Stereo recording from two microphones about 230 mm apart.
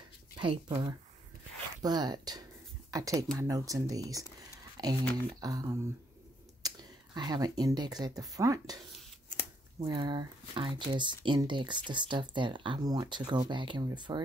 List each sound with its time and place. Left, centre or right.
0.4 s speech: centre
9.8 s speech: centre